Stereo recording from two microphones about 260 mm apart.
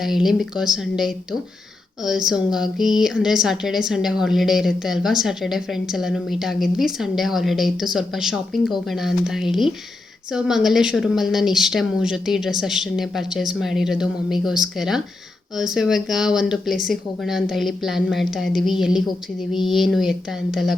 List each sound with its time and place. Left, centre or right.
0.0 s speech: centre